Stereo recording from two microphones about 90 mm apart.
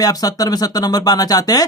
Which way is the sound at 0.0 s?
45° left (ahead or behind).